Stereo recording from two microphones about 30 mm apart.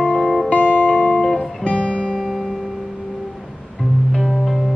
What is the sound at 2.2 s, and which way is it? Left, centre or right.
Music, centre.